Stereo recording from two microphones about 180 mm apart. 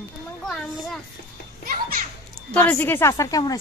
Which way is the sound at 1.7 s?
55° right (ahead or behind).